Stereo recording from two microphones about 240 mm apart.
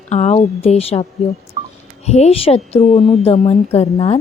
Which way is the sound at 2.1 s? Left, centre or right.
Left.